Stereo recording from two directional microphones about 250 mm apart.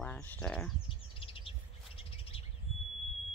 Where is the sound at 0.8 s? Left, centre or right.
Left.